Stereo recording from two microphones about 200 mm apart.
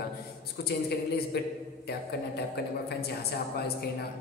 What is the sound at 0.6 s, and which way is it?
Speech, 50° left (ahead or behind).